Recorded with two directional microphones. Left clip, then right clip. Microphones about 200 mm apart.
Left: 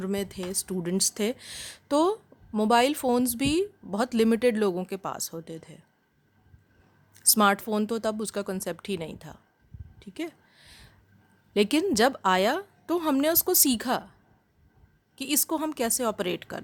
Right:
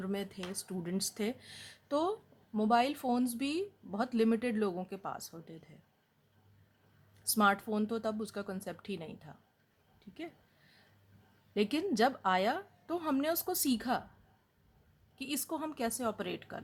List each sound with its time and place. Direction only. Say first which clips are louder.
0.0 s speech: left 8 dB; 50° left (ahead or behind)
7.1 s speech: left 7 dB; 50° left (ahead or behind)
10.0 s a sound: left 10 dB; 50° left (ahead or behind)
11.5 s speech: left 9 dB; 55° left (ahead or behind)
15.1 s speech: left 10 dB; 50° left (ahead or behind)